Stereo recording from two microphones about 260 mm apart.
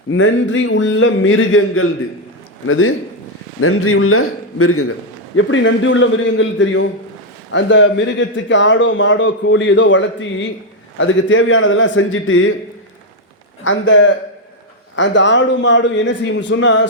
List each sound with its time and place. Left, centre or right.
0.1 s a man's voice: left
13.7 s speech: left